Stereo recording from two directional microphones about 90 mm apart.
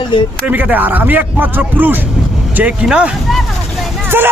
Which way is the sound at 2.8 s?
10° right (ahead or behind).